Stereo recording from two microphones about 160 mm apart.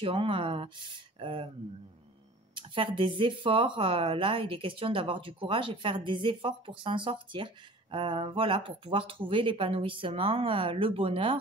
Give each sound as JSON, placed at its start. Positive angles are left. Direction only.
{"t": 0.0, "sound": "speech", "side_deg": -35}
{"t": 2.5, "sound": "speech", "side_deg": -30}